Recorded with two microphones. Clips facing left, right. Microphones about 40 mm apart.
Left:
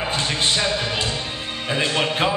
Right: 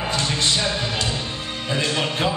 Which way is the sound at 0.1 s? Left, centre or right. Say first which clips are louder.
Right 1 dB; left.